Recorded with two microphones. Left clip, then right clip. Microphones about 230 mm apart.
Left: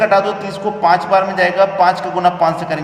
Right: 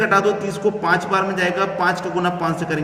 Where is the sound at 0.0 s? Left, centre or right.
Centre.